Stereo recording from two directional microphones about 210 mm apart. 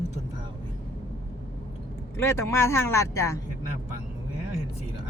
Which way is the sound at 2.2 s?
15° left (ahead or behind).